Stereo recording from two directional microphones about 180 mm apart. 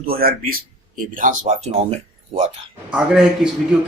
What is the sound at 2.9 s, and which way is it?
Speech, 5° right (ahead or behind).